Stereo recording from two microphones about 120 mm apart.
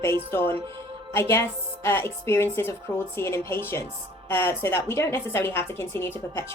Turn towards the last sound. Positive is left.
turn(degrees=20)  # may be behind; listen again after turning